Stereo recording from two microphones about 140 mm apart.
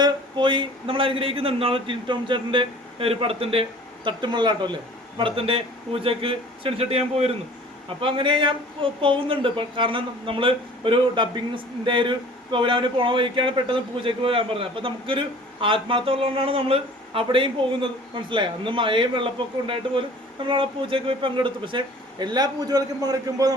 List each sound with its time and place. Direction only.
0.0 s speech: 35° right (ahead or behind)